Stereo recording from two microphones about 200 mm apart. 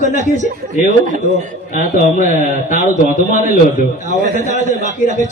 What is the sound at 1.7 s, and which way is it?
A man's voice, 40° left (ahead or behind).